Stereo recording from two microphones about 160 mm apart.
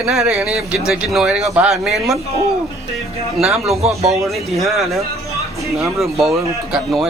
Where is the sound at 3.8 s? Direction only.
40° right (ahead or behind).